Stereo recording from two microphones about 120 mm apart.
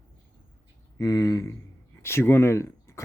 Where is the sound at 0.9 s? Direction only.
30° left (ahead or behind).